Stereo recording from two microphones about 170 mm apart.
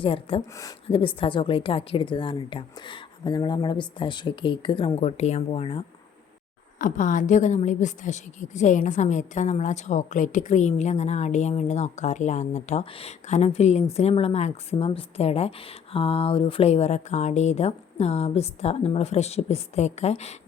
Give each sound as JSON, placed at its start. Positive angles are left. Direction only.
{"t": 0.0, "sound": "a woman's voice", "side_deg": 30}
{"t": 6.7, "sound": "a woman's voice", "side_deg": 50}